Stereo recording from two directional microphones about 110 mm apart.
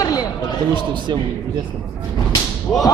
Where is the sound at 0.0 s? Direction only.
35° left (ahead or behind).